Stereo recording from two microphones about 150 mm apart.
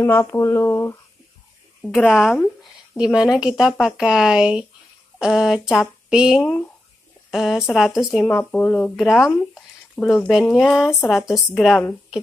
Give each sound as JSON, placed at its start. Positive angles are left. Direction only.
{"t": 0.0, "sound": "speech", "side_deg": 15}
{"t": 1.8, "sound": "a woman's voice", "side_deg": 0}
{"t": 8.3, "sound": "speech", "side_deg": 10}
{"t": 8.9, "sound": "speech", "side_deg": 0}